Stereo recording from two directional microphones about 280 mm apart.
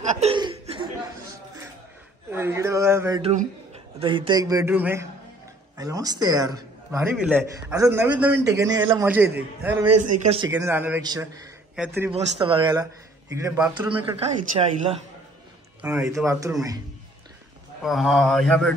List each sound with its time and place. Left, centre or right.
0.0 s chuckle: right
2.3 s a man's voice: centre
3.2 s a man's voice: right
10.2 s speech: centre
10.5 s a man's voice: centre
12.1 s a man's voice: centre
15.8 s a man's voice: centre
17.8 s speech: centre